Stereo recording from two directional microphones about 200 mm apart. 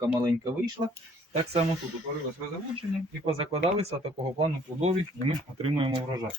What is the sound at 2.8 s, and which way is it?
Speech, 25° right (ahead or behind).